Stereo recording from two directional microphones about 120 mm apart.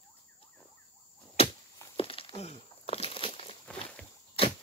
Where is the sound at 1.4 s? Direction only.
55° left (ahead or behind).